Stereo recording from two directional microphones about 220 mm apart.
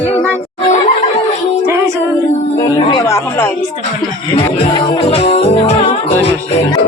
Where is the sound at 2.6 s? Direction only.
20° left (ahead or behind).